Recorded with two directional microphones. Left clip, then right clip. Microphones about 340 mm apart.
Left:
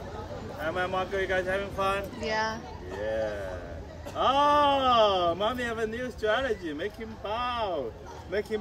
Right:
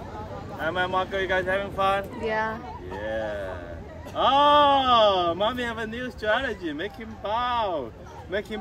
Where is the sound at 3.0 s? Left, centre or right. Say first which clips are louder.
Right 1 dB; centre.